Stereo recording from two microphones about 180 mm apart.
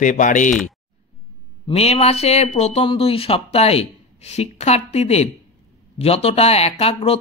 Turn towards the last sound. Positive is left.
turn(degrees=35)  # may be behind; listen again after turning